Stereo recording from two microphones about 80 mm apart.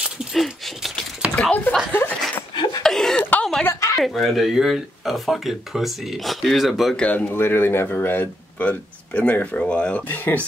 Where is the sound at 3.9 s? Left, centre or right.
Centre.